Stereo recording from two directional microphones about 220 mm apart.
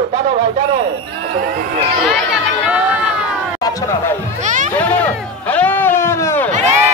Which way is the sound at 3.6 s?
15° left (ahead or behind).